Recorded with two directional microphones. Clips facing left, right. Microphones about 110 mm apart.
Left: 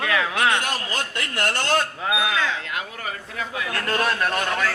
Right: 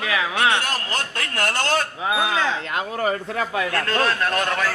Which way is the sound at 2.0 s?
30° right (ahead or behind).